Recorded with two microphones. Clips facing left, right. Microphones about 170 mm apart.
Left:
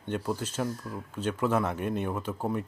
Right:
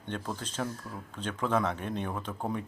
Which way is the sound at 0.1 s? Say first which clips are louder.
Left 5 dB; 10° left (ahead or behind).